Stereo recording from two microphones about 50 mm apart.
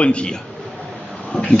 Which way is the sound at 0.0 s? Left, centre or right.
Left.